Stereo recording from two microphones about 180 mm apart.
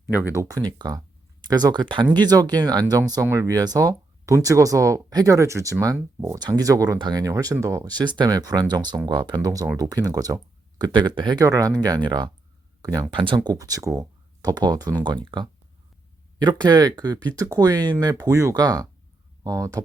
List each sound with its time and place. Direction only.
0.1 s speech: 10° right (ahead or behind)